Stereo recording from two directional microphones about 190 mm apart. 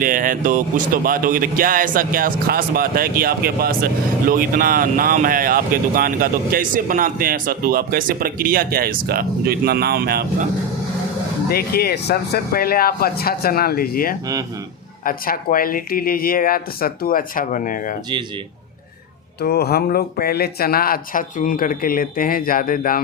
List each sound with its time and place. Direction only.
0.0 s speech: 45° right (ahead or behind)
11.4 s speech: 55° left (ahead or behind)
19.4 s speech: 60° left (ahead or behind)